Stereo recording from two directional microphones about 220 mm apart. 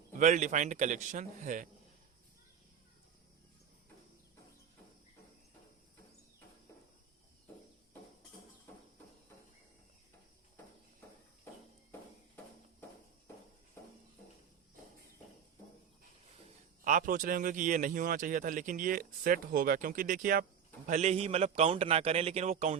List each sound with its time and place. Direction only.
0.2 s speech: 35° right (ahead or behind)
16.8 s a man's voice: 40° right (ahead or behind)